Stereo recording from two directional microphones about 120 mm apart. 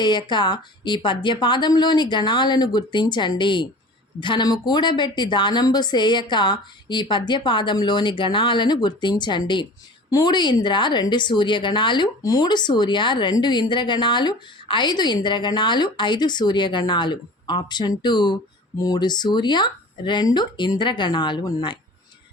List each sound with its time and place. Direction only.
0.0 s speech: 40° left (ahead or behind)